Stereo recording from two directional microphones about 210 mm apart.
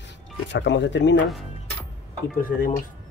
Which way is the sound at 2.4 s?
40° left (ahead or behind).